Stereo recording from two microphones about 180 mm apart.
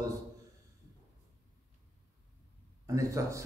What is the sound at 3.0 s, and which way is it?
Speech, 20° right (ahead or behind).